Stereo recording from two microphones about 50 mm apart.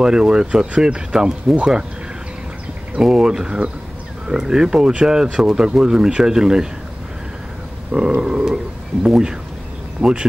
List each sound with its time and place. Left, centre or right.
0.0 s speech: centre
3.0 s speech: centre
7.9 s speech: centre